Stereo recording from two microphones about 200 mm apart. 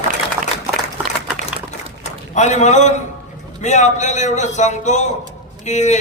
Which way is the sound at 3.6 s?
35° left (ahead or behind).